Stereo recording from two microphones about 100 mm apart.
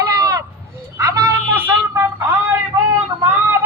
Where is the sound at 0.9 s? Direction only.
30° right (ahead or behind).